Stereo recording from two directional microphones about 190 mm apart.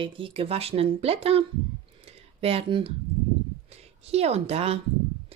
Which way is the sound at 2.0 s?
30° right (ahead or behind).